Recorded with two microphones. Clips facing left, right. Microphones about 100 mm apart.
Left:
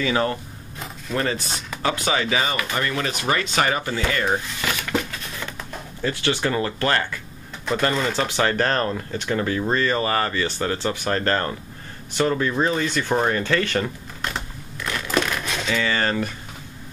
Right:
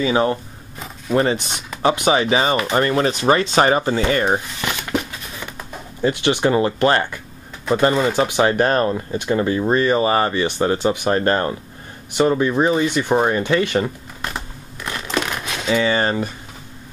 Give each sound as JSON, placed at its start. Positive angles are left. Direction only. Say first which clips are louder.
{"t": 0.0, "sound": "speech", "louder": "right 4 dB", "side_deg": -20}
{"t": 4.6, "sound": "a sound", "louder": "right 2 dB", "side_deg": -15}
{"t": 7.9, "sound": "speech", "louder": "right 5 dB", "side_deg": -15}
{"t": 15.1, "sound": "crumpling", "louder": "even", "side_deg": -15}
{"t": 15.7, "sound": "speech", "louder": "right 5 dB", "side_deg": -20}